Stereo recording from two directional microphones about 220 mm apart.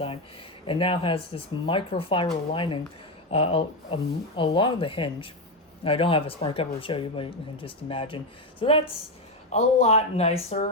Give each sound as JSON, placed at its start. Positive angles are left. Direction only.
{"t": 0.7, "sound": "speech", "side_deg": 25}